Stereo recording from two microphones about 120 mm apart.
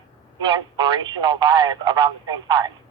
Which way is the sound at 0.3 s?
40° right (ahead or behind).